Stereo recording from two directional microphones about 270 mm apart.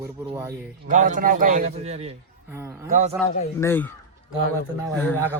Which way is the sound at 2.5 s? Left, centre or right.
Centre.